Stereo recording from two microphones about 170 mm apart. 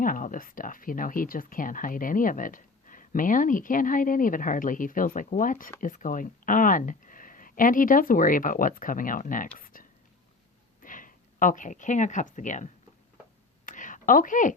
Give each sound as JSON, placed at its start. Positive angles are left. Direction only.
{"t": 0.0, "sound": "speech", "side_deg": 55}
{"t": 10.8, "sound": "speech", "side_deg": 50}
{"t": 13.7, "sound": "a sound", "side_deg": 50}